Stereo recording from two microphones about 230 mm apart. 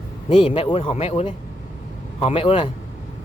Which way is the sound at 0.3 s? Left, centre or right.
Left.